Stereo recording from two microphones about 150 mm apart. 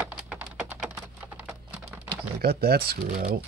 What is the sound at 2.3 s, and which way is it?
Speech, 90° right.